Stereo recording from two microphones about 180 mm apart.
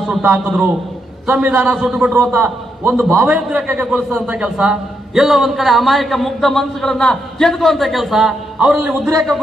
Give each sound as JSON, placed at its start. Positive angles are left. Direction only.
{"t": 0.1, "sound": "a man's voice", "side_deg": -10}